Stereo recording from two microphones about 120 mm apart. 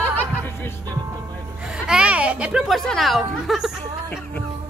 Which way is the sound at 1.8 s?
10° right (ahead or behind).